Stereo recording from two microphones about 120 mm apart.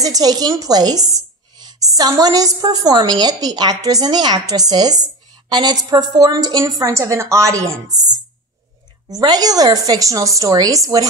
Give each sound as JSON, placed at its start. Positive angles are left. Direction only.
{"t": 0.0, "sound": "a woman's voice", "side_deg": -30}